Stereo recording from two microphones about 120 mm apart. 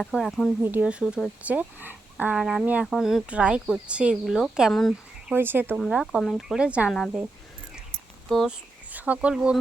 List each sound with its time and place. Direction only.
0.0 s speech: centre (ahead or behind)
0.6 s speech: 15° right (ahead or behind); by 4.9 s centre (ahead or behind)
5.3 s speech: 15° right (ahead or behind)
5.7 s speech: 5° right (ahead or behind)
8.3 s speech: centre (ahead or behind)
8.9 s speech: 15° right (ahead or behind)